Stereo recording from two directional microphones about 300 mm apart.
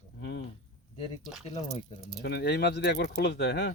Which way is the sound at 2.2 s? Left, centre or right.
Left.